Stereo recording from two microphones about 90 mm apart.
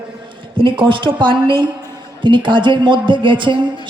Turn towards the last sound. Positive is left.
turn(degrees=-65)  # may be behind; listen again after turning